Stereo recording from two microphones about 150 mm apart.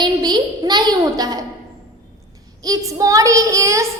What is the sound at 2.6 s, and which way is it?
Music, 25° right (ahead or behind).